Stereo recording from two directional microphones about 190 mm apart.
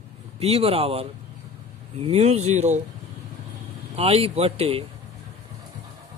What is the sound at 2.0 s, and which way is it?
Speech, 35° right (ahead or behind).